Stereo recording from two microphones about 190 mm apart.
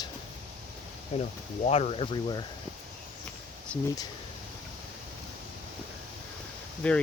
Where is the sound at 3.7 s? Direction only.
5° left (ahead or behind).